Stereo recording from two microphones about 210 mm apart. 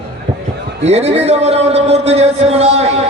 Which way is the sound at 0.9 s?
30° right (ahead or behind).